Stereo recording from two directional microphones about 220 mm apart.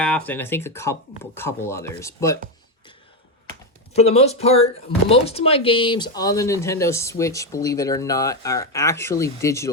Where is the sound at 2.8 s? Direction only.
20° left (ahead or behind).